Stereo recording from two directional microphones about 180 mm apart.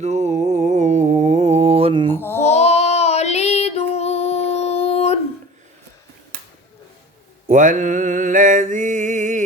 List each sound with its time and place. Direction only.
0.0 s mantra: 40° right (ahead or behind)
2.1 s babbling: 10° left (ahead or behind)
2.4 s child singing: 35° left (ahead or behind)
7.4 s mantra: 45° right (ahead or behind)